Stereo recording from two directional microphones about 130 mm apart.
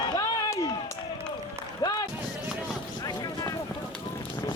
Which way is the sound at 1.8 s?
30° left (ahead or behind).